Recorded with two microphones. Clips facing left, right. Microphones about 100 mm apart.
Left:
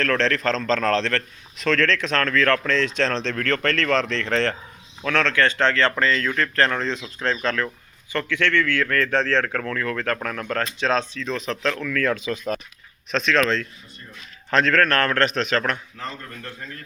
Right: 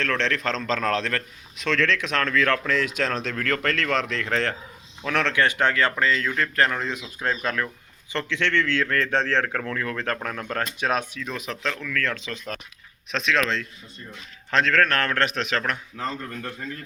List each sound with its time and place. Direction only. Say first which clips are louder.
0.0 s a man's voice: left 4 dB; centre (ahead or behind)
5.0 s a man's voice: left 2 dB; 15° right (ahead or behind)
11.9 s a man's voice: left 5 dB; 10° left (ahead or behind)